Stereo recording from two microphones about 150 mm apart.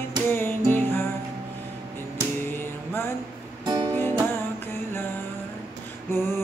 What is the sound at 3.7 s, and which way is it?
Music, 30° right (ahead or behind).